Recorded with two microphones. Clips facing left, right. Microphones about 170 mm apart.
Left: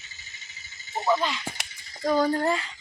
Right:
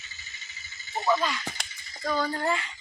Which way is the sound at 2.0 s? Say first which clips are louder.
Left 5 dB; 40° left (ahead or behind).